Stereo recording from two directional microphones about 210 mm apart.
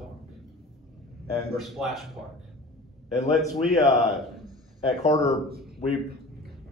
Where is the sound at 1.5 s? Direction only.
Centre (ahead or behind).